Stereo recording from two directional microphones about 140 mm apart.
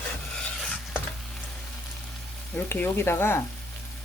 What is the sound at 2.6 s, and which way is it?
Speech, 15° left (ahead or behind).